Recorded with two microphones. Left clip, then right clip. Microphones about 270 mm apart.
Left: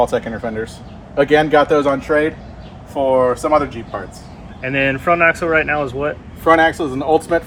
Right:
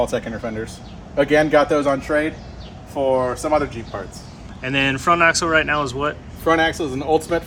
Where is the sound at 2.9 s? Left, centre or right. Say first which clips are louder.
Left 5 dB; left.